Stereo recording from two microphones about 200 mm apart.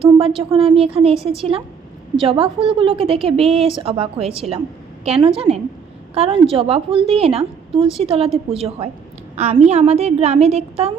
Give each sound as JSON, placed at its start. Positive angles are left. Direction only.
{"t": 0.0, "sound": "a woman's voice", "side_deg": -30}